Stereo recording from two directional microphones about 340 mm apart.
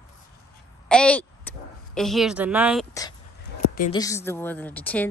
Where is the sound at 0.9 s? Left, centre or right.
Centre.